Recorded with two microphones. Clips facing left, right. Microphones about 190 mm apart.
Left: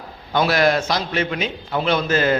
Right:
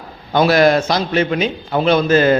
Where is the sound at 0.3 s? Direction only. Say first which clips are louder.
Right 5 dB; 35° right (ahead or behind).